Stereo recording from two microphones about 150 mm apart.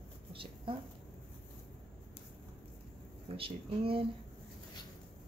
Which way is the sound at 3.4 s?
40° right (ahead or behind).